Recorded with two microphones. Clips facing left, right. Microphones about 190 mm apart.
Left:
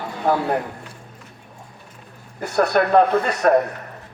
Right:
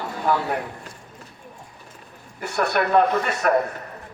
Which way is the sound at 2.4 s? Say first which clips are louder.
Left 4 dB; 35° left (ahead or behind).